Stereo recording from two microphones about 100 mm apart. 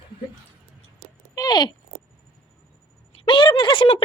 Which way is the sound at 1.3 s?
45° left (ahead or behind).